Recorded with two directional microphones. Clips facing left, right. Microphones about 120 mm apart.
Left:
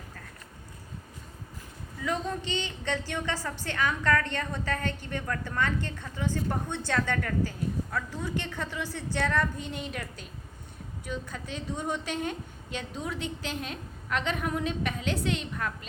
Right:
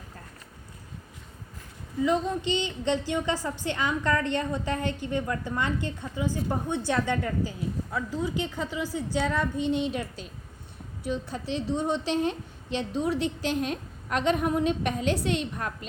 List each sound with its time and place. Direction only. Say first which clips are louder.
2.0 s a woman's voice: right 5 dB; 15° right (ahead or behind)
9.9 s a woman's voice: right 5 dB; 25° right (ahead or behind)